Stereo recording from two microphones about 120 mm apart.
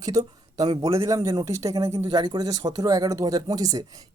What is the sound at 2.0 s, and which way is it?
Speech, 40° right (ahead or behind).